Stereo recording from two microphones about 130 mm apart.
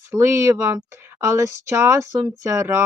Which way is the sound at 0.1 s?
25° right (ahead or behind).